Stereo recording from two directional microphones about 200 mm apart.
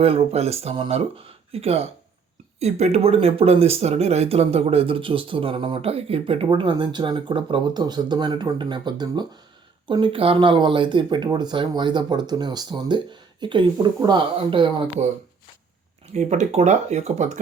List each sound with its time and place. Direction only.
0.0 s speech: 30° right (ahead or behind)
16.1 s speech: 35° right (ahead or behind)